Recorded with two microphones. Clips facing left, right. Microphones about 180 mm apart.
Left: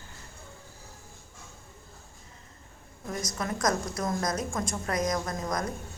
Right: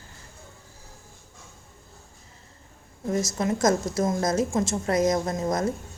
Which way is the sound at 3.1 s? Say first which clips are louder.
Right 8 dB; 25° right (ahead or behind).